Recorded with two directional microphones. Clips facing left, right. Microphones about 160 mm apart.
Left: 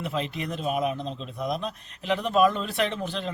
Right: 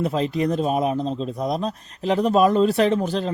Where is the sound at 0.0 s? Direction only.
35° right (ahead or behind).